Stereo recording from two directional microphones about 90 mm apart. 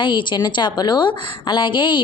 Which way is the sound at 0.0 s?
60° left (ahead or behind).